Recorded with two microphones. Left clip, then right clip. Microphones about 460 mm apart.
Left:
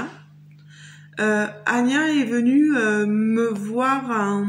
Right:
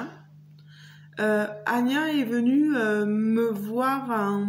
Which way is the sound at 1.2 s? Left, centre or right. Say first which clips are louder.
Left 3 dB; right.